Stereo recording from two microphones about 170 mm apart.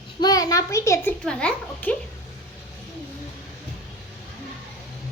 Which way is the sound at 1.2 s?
5° left (ahead or behind).